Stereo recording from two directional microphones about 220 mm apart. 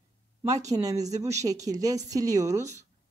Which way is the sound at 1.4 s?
15° right (ahead or behind).